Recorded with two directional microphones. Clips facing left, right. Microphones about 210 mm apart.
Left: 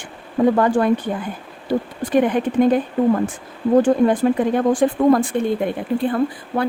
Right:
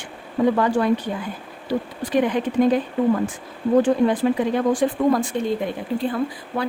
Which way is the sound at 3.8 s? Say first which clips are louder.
Left 3 dB; 50° left (ahead or behind).